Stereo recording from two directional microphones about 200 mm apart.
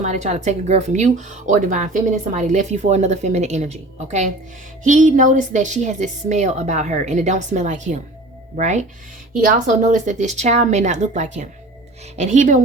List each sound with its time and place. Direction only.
0.0 s speech: 35° right (ahead or behind)